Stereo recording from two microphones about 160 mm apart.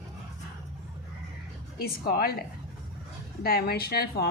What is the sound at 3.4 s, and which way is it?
Speech, 75° left (ahead or behind).